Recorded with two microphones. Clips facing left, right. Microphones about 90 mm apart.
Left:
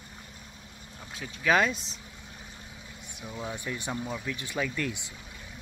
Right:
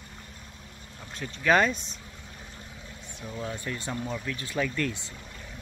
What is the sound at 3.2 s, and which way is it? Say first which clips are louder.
Speech: right 1 dB; 10° left (ahead or behind).